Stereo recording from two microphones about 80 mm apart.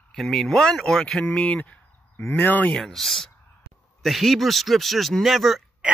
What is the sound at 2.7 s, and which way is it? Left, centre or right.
Speech, centre.